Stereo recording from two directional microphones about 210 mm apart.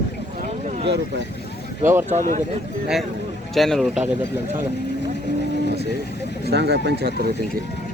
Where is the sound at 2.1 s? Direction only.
40° right (ahead or behind).